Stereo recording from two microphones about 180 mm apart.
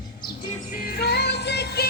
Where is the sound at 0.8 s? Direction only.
60° left (ahead or behind).